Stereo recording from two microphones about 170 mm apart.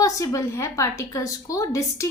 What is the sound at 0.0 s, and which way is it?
A woman's voice, 20° left (ahead or behind).